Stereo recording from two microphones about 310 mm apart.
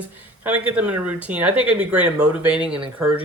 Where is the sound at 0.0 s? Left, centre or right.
Centre.